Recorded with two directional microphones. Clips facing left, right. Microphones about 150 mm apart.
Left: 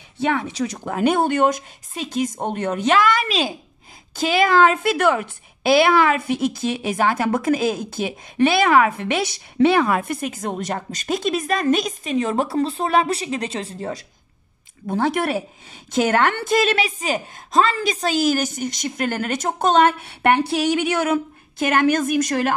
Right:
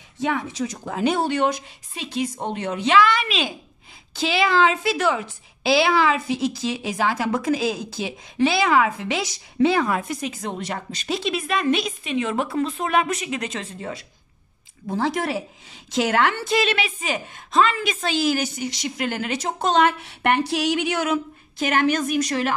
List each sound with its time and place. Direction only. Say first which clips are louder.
0.2 s a woman's voice: left 3 dB; 70° left (ahead or behind); by 14.0 s 40° left (ahead or behind)
14.9 s a woman's voice: left 3 dB; 60° left (ahead or behind)